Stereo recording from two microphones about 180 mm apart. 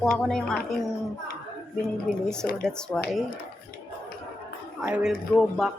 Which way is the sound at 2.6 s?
5° left (ahead or behind).